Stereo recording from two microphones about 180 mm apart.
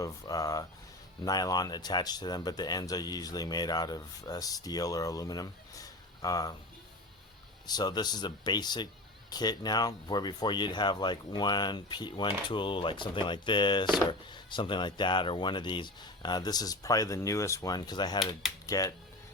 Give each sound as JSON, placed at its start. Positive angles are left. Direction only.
{"t": 0.0, "sound": "speech", "side_deg": 20}
{"t": 7.7, "sound": "speech", "side_deg": 25}